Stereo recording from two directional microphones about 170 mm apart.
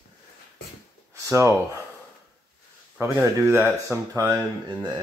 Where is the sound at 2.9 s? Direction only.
15° right (ahead or behind).